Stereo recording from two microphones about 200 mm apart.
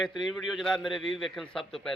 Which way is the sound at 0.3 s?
Centre (ahead or behind).